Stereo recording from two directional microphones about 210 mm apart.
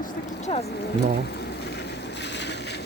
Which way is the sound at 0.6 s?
50° left (ahead or behind).